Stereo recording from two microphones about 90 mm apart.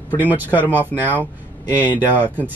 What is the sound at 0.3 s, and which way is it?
Speech, 20° right (ahead or behind).